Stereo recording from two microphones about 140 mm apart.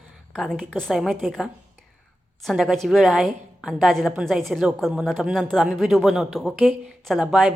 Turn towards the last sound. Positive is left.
turn(degrees=-5)  # may be behind; listen again after turning